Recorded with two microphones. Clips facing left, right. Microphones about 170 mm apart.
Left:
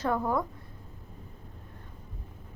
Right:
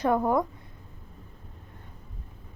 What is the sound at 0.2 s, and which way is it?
Speech, 20° right (ahead or behind).